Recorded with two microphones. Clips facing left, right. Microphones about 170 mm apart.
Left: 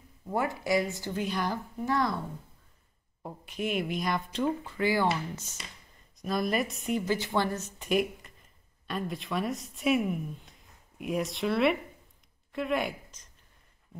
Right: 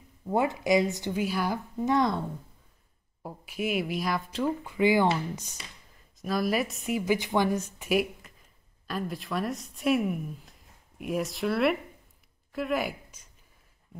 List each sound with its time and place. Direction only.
0.3 s speech: 20° right (ahead or behind)
1.2 s speech: 5° right (ahead or behind)
1.8 s speech: 20° right (ahead or behind)
3.2 s speech: 5° right (ahead or behind)
4.6 s speech: 15° right (ahead or behind)
6.2 s a woman's voice: centre (ahead or behind)
12.5 s a sound: centre (ahead or behind)